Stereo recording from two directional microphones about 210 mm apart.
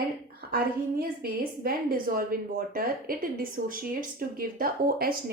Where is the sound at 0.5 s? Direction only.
45° right (ahead or behind).